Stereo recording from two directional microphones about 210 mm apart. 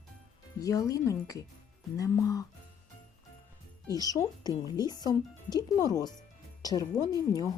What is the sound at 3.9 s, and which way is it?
A woman's voice, 15° left (ahead or behind).